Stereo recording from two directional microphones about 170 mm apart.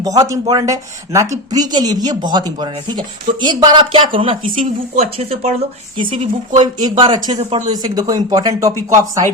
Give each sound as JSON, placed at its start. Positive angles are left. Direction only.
{"t": 0.0, "sound": "speech", "side_deg": -20}
{"t": 7.3, "sound": "speech", "side_deg": -40}
{"t": 7.7, "sound": "speech", "side_deg": -20}